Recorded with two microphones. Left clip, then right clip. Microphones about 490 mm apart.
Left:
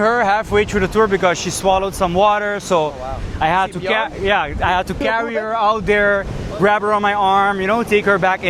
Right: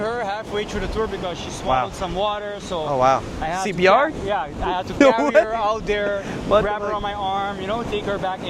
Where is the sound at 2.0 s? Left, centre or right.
Left.